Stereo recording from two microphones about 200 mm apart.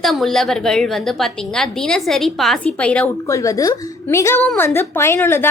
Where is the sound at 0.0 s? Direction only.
Centre (ahead or behind).